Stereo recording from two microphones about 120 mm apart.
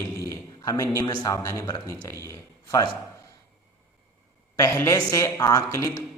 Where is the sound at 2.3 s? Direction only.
30° left (ahead or behind).